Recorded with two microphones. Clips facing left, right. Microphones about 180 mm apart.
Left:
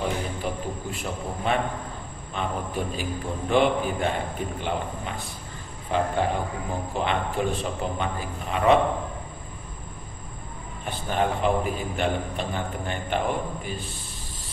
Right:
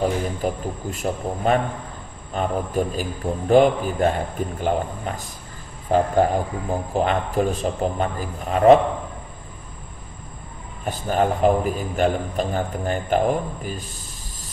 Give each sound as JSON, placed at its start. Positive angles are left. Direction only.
{"t": 0.0, "sound": "a man's voice", "side_deg": -45}
{"t": 10.9, "sound": "a man's voice", "side_deg": -40}